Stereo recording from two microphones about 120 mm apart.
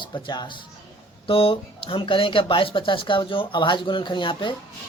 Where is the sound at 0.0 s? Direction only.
40° left (ahead or behind).